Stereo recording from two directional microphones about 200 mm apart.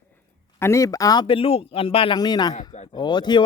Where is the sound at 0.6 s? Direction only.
15° left (ahead or behind).